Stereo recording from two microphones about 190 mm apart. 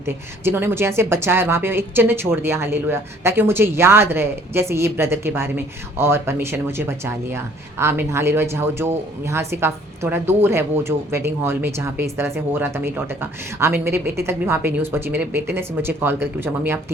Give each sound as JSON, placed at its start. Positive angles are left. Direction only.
{"t": 0.0, "sound": "speech", "side_deg": -10}